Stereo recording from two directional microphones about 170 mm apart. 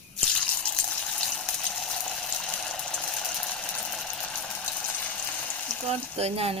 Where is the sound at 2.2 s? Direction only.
5° left (ahead or behind).